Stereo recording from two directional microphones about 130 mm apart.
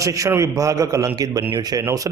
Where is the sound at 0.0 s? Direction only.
25° right (ahead or behind).